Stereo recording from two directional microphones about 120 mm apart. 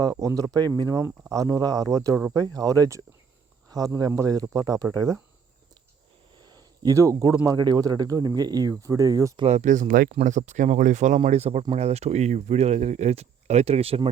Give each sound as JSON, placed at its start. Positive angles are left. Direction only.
{"t": 0.0, "sound": "speech", "side_deg": -30}
{"t": 6.4, "sound": "a sound", "side_deg": -35}
{"t": 7.4, "sound": "speech", "side_deg": -35}
{"t": 9.4, "sound": "speech", "side_deg": -75}